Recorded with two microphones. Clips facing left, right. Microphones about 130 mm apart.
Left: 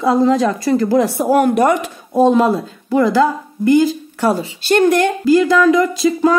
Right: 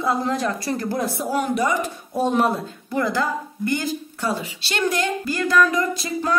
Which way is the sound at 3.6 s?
90° left.